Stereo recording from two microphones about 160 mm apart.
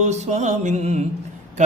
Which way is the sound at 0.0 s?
45° right (ahead or behind).